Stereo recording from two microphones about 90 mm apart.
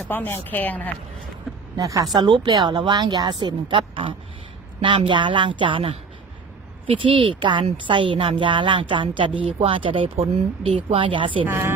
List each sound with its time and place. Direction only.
0.1 s speech: 25° left (ahead or behind)
1.7 s a woman's voice: 40° right (ahead or behind)
2.1 s a woman's voice: 55° right (ahead or behind); by 10.1 s 80° right
10.9 s a woman's voice: 65° right (ahead or behind)
11.4 s speech: 25° right (ahead or behind)